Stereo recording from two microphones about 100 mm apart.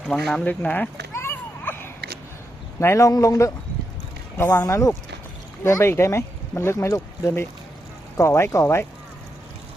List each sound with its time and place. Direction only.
0.1 s speech: 5° left (ahead or behind)
0.4 s children playing: 15° left (ahead or behind)
2.8 s a man's voice: 30° left (ahead or behind)
4.6 s a man's voice: 35° left (ahead or behind)